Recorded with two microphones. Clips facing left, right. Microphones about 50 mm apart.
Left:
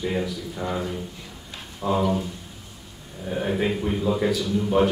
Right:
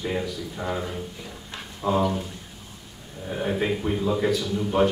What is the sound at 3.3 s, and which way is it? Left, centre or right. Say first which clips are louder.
Speech: left 1 dB; centre.